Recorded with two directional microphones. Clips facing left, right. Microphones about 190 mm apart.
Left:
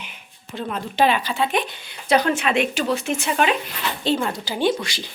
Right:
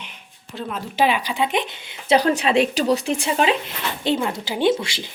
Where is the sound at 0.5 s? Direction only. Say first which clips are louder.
Left 1 dB; 5° right (ahead or behind).